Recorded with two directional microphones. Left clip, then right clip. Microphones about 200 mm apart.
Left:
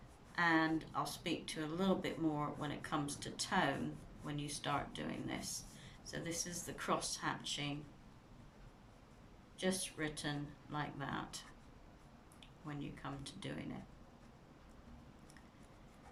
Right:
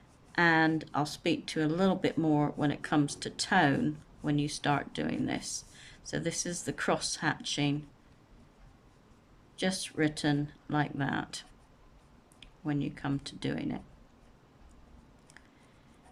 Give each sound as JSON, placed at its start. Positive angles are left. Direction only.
{"t": 0.3, "sound": "speech", "side_deg": -45}
{"t": 9.6, "sound": "speech", "side_deg": -45}